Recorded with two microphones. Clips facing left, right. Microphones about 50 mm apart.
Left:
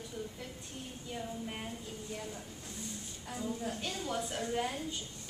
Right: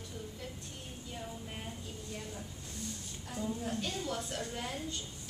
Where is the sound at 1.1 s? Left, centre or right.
Centre.